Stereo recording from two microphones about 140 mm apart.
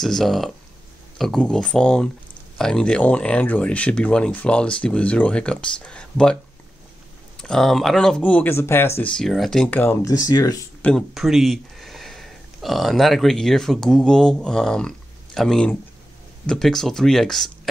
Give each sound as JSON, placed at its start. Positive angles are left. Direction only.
{"t": 0.0, "sound": "speech", "side_deg": 0}
{"t": 7.3, "sound": "speech", "side_deg": 5}
{"t": 9.1, "sound": "speech", "side_deg": 5}
{"t": 10.0, "sound": "speech", "side_deg": 25}
{"t": 10.8, "sound": "speech", "side_deg": 5}